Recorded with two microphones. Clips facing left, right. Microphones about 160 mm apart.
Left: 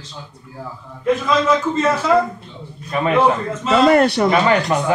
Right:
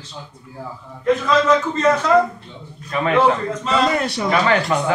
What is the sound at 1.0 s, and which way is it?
A man's voice, 10° left (ahead or behind).